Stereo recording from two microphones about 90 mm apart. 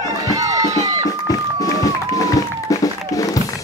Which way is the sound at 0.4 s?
40° right (ahead or behind).